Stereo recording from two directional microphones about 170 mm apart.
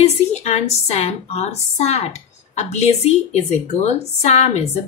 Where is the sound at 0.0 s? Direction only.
40° left (ahead or behind).